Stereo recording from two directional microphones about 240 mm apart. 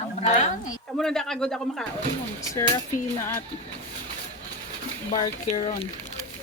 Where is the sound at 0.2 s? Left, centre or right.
Left.